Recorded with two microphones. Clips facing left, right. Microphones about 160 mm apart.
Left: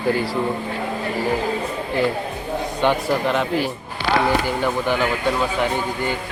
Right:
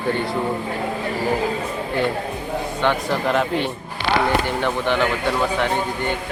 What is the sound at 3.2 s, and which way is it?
Speech, centre (ahead or behind).